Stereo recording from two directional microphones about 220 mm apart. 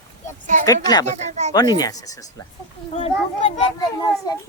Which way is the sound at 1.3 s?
30° right (ahead or behind).